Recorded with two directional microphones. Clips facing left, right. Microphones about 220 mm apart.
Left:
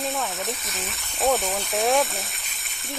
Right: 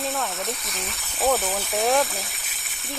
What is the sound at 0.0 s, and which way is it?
Speech, centre (ahead or behind).